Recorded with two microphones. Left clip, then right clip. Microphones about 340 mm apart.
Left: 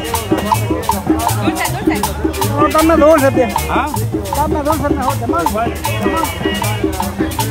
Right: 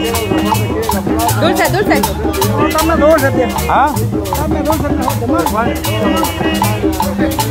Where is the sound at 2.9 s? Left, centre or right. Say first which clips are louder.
Right 1 dB; left.